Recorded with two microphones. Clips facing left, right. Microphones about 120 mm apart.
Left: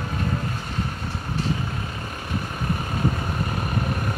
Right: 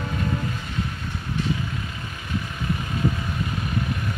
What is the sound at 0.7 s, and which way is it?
Vehicle, 35° left (ahead or behind).